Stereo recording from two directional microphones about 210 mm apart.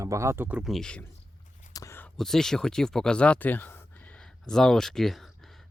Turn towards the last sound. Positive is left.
turn(degrees=0)  # may be behind; listen again after turning